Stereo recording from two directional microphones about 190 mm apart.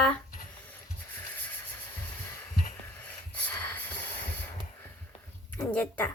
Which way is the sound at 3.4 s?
10° left (ahead or behind).